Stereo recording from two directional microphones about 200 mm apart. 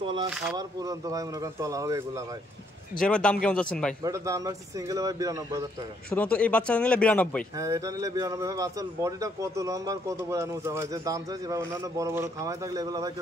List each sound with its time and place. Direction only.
0.0 s speech: 25° right (ahead or behind)
0.3 s speech: 5° right (ahead or behind)
0.6 s a man's voice: 20° right (ahead or behind)
3.0 s speech: 5° left (ahead or behind)
4.0 s a man's voice: 15° right (ahead or behind)
6.0 s a man's voice: 5° left (ahead or behind)
7.5 s a man's voice: 15° right (ahead or behind)